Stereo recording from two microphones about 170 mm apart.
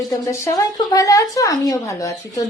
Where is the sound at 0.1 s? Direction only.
15° left (ahead or behind).